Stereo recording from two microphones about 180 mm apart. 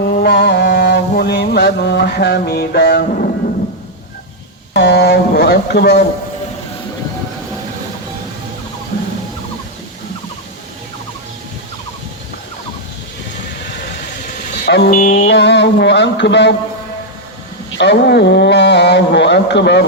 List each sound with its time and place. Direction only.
0.2 s mantra: 65° left (ahead or behind)
4.7 s speech: 70° left (ahead or behind)
14.6 s vehicle: 70° left (ahead or behind)
14.8 s mantra: 45° left (ahead or behind)
15.3 s speech: 75° left (ahead or behind)
17.7 s speech: 70° left (ahead or behind)